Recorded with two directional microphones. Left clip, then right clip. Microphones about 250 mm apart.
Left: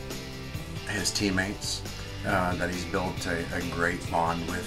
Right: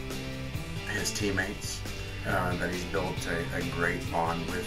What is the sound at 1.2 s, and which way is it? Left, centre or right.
Speech, centre.